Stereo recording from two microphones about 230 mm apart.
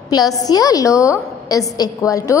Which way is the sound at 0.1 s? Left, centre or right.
Centre.